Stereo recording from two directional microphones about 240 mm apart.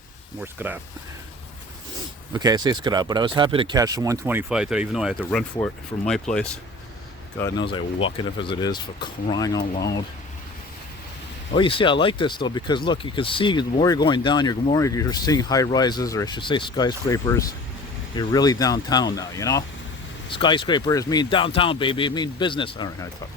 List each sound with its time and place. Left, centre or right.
0.4 s speech: centre
2.3 s speech: centre
7.3 s speech: centre
11.5 s speech: left